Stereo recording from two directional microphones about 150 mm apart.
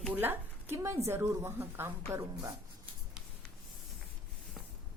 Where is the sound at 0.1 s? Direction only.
15° right (ahead or behind).